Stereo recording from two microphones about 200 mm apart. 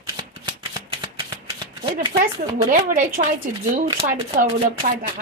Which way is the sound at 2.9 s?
40° right (ahead or behind).